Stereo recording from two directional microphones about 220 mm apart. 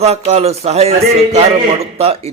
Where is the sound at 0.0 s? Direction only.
30° right (ahead or behind).